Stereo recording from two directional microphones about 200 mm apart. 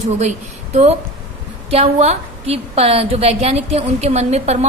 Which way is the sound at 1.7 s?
30° right (ahead or behind).